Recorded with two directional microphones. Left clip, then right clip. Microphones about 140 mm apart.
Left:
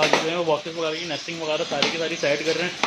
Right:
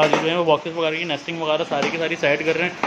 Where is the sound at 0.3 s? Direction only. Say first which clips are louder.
Right 4 dB; 25° right (ahead or behind).